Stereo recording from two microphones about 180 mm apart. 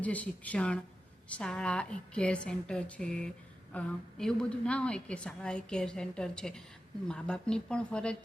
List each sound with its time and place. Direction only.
0.0 s a woman's voice: 10° left (ahead or behind)